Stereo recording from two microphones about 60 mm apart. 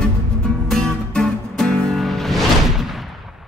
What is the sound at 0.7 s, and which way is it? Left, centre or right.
Music, centre.